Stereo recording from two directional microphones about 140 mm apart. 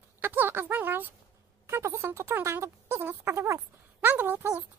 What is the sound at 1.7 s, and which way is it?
Speech, 20° right (ahead or behind).